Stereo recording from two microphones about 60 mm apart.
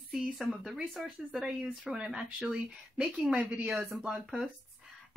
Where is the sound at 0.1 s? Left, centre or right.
Centre.